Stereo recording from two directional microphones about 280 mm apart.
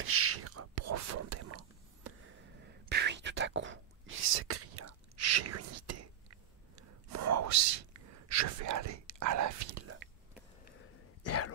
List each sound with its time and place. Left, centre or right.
0.0 s whispering: right
2.0 s whispering: right
7.1 s whispering: right
11.2 s throat clearing: left